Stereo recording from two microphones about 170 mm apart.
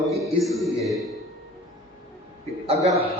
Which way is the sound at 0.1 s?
Centre (ahead or behind).